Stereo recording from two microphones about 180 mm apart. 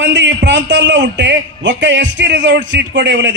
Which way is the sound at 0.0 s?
75° right (ahead or behind).